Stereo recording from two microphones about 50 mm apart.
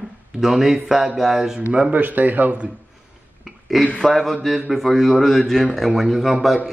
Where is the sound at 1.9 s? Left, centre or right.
Right.